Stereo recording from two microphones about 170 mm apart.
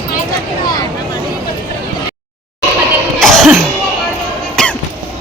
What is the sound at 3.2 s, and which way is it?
Cough, 5° left (ahead or behind).